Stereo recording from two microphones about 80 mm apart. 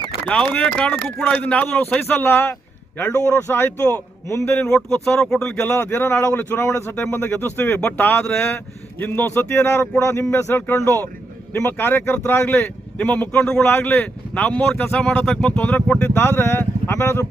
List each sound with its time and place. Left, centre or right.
0.3 s speech: centre; by 4.6 s left
4.6 s speech: centre
5.6 s speech: left
8.2 s speech: centre
9.0 s speech: left
13.7 s speech: left
16.1 s speech: left